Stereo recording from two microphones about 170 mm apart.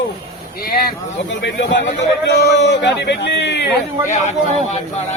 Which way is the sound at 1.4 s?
90° left.